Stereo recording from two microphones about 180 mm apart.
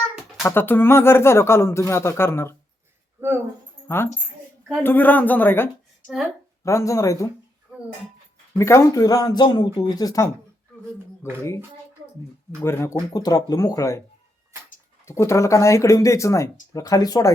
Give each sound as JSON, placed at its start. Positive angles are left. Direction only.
{"t": 0.4, "sound": "speech", "side_deg": 10}
{"t": 3.2, "sound": "speech", "side_deg": -15}
{"t": 3.8, "sound": "a woman's voice", "side_deg": 15}
{"t": 6.7, "sound": "speech", "side_deg": 15}
{"t": 8.5, "sound": "speech", "side_deg": 15}
{"t": 12.6, "sound": "speech", "side_deg": 15}
{"t": 15.0, "sound": "speech", "side_deg": 15}